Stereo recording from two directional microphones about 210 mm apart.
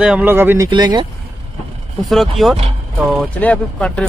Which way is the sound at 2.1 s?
Centre (ahead or behind).